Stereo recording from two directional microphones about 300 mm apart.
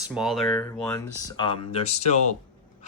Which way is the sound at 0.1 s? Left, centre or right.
Centre.